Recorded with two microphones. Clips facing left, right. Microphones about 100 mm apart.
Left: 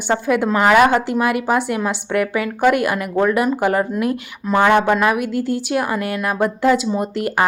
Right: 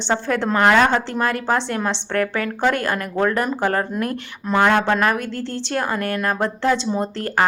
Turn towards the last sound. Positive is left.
turn(degrees=10)  # may be behind; listen again after turning